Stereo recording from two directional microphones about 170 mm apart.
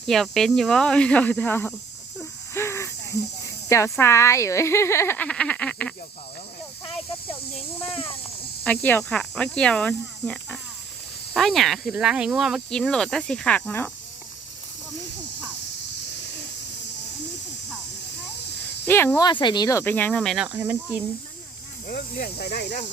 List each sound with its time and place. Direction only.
0.0 s speech: centre (ahead or behind)
2.6 s cricket: 15° left (ahead or behind)
3.7 s speech: 15° left (ahead or behind)
7.9 s speech: 35° left (ahead or behind)
8.6 s speech: 10° left (ahead or behind)
18.9 s speech: 15° left (ahead or behind)
19.3 s speech: 25° left (ahead or behind); by 20.1 s 10° left (ahead or behind)
20.1 s speech: centre (ahead or behind)
21.8 s speech: 65° left (ahead or behind)